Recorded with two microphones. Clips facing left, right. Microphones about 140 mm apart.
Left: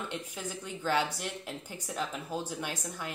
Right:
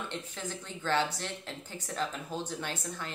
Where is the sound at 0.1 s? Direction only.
10° left (ahead or behind).